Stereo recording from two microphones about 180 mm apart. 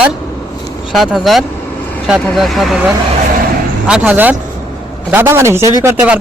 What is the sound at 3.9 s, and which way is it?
Speech, 10° right (ahead or behind).